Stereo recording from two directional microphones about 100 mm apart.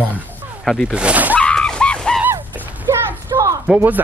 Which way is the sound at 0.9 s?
15° right (ahead or behind).